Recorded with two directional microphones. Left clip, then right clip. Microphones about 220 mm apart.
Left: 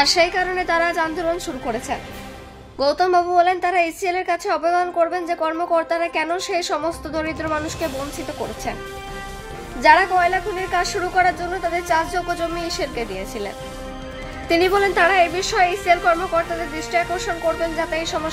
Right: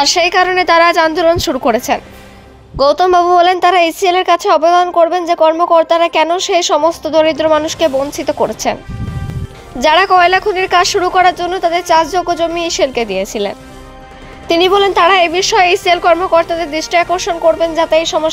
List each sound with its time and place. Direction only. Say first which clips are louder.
0.0 s a woman's voice: right 7 dB; 35° right (ahead or behind)
9.8 s a woman's voice: right 6 dB; 40° right (ahead or behind)